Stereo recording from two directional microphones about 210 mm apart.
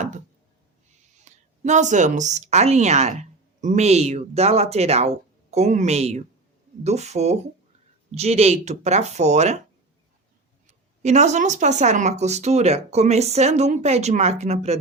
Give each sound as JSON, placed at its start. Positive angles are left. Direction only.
{"t": 1.2, "sound": "speech", "side_deg": -35}
{"t": 10.7, "sound": "speech", "side_deg": -35}